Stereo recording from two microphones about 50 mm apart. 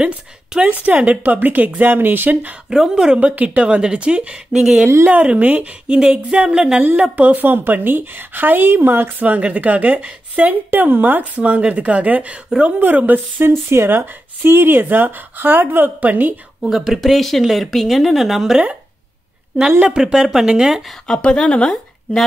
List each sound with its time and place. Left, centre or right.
0.6 s a woman's voice: right
2.9 s speech: centre
3.2 s speech: right
5.4 s a woman's voice: right
5.9 s speech: centre
7.4 s a woman's voice: right
9.2 s a woman's voice: right
12.7 s a woman's voice: right
13.4 s speech: right
16.6 s speech: centre
19.9 s speech: centre
21.1 s speech: centre